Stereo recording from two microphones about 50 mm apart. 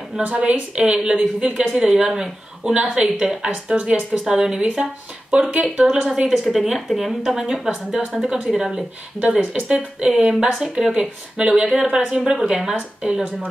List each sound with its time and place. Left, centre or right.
0.2 s a woman's voice: right
6.5 s a woman's voice: centre
9.2 s a woman's voice: right